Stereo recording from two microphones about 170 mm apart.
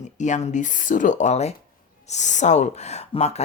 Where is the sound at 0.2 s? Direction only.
45° left (ahead or behind).